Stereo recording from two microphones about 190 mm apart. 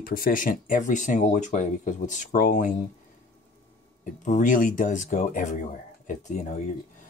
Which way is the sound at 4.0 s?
40° left (ahead or behind).